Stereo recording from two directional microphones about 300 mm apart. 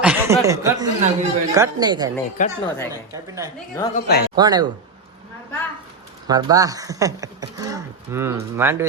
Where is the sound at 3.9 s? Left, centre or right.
Left.